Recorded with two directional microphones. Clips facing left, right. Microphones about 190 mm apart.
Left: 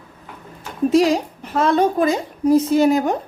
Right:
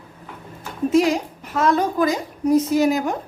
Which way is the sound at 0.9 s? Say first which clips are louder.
Left 2 dB; 35° left (ahead or behind).